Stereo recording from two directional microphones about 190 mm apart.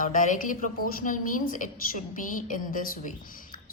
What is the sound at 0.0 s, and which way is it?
A woman's voice, 45° left (ahead or behind).